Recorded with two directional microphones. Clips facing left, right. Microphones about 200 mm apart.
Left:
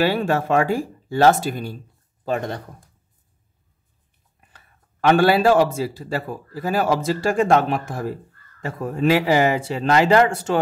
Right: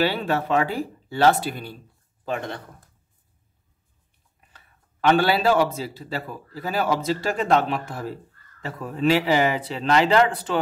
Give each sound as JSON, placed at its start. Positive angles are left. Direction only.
{"t": 0.0, "sound": "a man's voice", "side_deg": 45}
{"t": 4.5, "sound": "a man's voice", "side_deg": 50}